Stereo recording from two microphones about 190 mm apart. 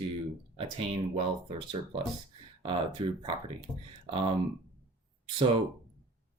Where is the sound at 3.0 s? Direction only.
25° right (ahead or behind).